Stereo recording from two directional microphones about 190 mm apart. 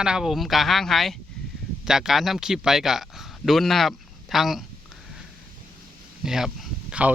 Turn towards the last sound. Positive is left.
turn(degrees=-5)  # may be behind; listen again after turning